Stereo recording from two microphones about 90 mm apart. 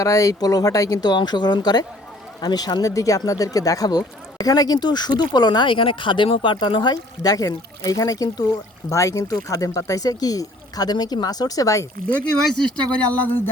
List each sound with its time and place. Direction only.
0.0 s speech: 40° left (ahead or behind)
12.7 s speech: 20° left (ahead or behind)